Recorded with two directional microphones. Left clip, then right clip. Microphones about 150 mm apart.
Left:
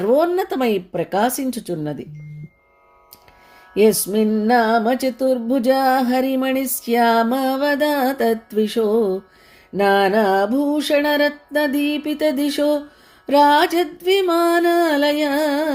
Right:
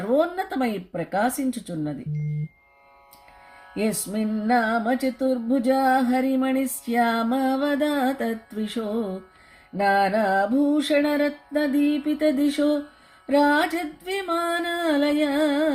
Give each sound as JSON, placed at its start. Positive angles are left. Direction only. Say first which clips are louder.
{"t": 0.1, "sound": "music", "louder": "left 5 dB", "side_deg": 40}
{"t": 3.8, "sound": "music", "louder": "left 12 dB", "side_deg": 45}